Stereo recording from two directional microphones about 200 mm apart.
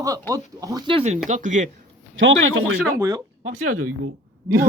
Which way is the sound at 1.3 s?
40° right (ahead or behind).